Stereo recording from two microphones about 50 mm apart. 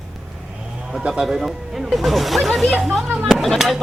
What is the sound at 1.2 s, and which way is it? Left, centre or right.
Speech, centre.